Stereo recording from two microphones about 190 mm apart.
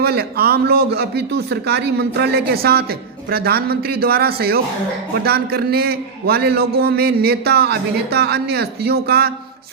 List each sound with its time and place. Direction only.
0.0 s a man's voice: 55° right (ahead or behind)